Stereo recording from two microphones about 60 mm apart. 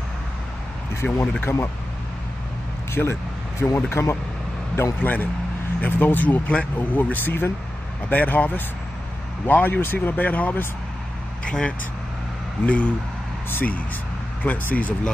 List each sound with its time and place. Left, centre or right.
1.0 s speech: centre
1.4 s speech: left
2.9 s speech: left
5.0 s speech: left
11.4 s speech: centre
13.5 s speech: left